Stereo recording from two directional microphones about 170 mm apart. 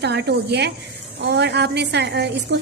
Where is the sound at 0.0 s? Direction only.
85° right.